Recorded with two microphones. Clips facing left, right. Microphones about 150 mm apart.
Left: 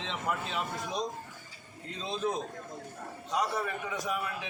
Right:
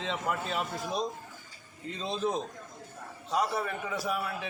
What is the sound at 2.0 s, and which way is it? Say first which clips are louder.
Speech: right 1 dB; 35° right (ahead or behind).